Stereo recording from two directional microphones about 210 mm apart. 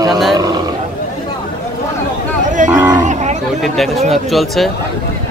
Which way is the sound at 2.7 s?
10° right (ahead or behind).